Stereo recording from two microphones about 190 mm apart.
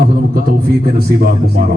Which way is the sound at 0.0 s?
50° right (ahead or behind).